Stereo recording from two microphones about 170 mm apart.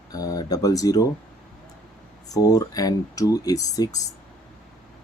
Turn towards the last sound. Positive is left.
turn(degrees=20)  # may be behind; listen again after turning